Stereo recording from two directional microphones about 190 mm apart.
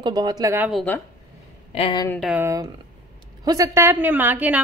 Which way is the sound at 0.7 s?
10° left (ahead or behind).